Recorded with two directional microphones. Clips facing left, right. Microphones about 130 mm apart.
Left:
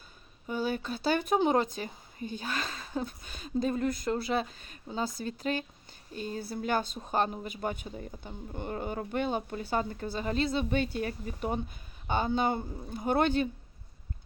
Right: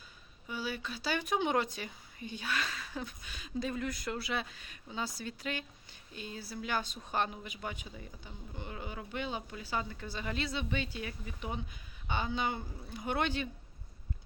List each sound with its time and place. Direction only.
0.4 s speech: 45° left (ahead or behind)